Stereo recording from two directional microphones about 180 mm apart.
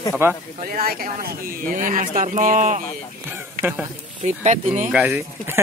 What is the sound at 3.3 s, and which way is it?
Speech, 10° right (ahead or behind).